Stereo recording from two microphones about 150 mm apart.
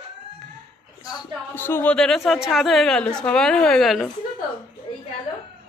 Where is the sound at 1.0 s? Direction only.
25° left (ahead or behind).